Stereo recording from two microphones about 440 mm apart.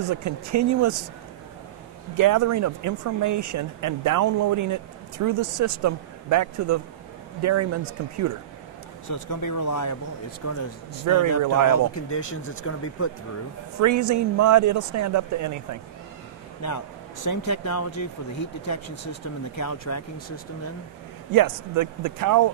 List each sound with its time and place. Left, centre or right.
0.0 s speech: right
2.1 s speech: right
9.1 s a man's voice: left
11.1 s speech: right
11.9 s a man's voice: left
13.7 s speech: right
16.6 s a man's voice: left
19.5 s a man's voice: left
21.3 s speech: right